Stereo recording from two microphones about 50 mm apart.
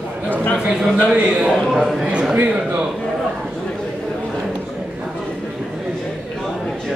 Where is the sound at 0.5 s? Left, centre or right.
Centre.